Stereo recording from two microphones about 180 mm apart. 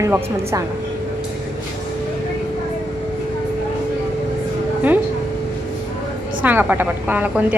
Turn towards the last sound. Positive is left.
turn(degrees=-10)  # may be behind; listen again after turning